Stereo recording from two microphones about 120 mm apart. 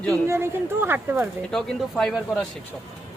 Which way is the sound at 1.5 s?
5° left (ahead or behind).